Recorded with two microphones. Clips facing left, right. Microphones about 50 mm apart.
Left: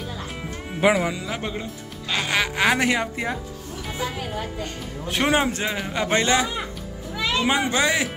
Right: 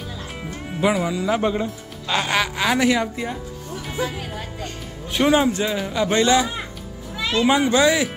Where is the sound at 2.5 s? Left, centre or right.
Left.